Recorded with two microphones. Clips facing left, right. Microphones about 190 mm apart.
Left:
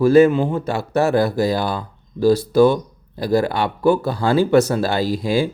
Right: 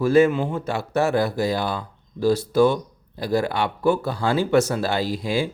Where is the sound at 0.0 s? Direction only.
35° left (ahead or behind).